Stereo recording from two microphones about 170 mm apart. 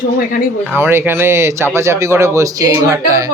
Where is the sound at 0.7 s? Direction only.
15° right (ahead or behind).